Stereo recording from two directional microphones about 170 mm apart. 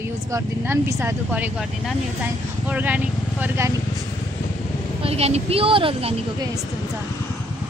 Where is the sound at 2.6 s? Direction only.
10° right (ahead or behind).